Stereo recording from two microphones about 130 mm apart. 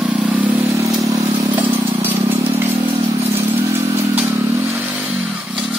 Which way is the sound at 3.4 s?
20° right (ahead or behind).